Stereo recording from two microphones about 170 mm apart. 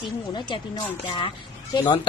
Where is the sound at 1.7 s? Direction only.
25° left (ahead or behind).